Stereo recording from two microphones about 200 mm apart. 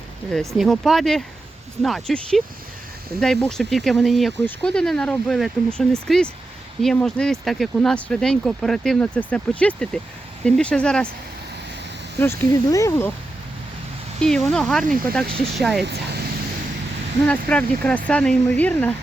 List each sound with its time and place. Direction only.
0.3 s speech: centre (ahead or behind)
12.2 s speech: 15° left (ahead or behind)
14.2 s speech: 5° left (ahead or behind)
15.8 s speech: 55° right (ahead or behind)
17.2 s speech: 5° left (ahead or behind)